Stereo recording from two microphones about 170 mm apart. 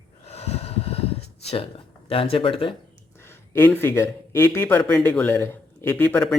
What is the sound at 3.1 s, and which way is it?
Speech, 15° left (ahead or behind).